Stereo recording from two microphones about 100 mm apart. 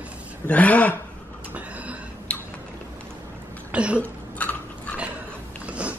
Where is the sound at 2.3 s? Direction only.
10° left (ahead or behind).